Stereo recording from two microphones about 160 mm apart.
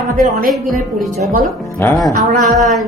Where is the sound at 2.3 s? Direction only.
Centre (ahead or behind).